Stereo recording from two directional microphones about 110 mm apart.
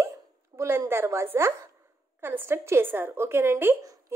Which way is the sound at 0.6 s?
25° right (ahead or behind).